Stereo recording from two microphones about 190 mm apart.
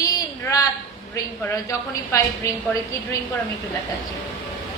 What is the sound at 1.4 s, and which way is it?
Speech, 15° left (ahead or behind).